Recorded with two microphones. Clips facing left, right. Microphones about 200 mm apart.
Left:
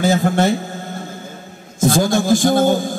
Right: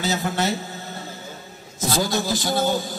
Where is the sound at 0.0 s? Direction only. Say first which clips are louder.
Left 8 dB; 50° left (ahead or behind).